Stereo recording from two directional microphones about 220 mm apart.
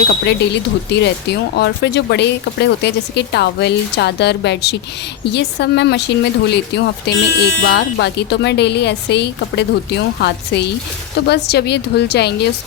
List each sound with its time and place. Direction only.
0.3 s speech: 50° left (ahead or behind)